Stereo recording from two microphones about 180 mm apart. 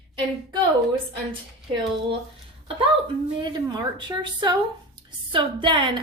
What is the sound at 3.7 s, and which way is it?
A woman's voice, 25° right (ahead or behind).